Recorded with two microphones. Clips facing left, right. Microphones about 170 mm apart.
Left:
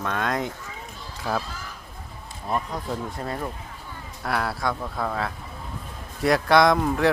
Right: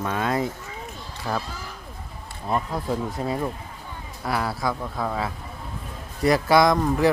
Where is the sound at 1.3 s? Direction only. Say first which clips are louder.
Left 1 dB; 5° left (ahead or behind).